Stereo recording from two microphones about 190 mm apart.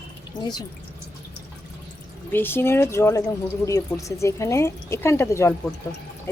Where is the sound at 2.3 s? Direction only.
10° left (ahead or behind).